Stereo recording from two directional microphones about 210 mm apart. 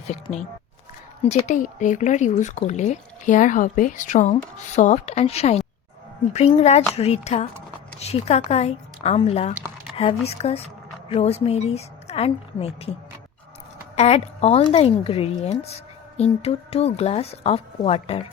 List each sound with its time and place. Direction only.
0.1 s a woman's voice: 30° left (ahead or behind)
13.9 s a woman's voice: 30° left (ahead or behind)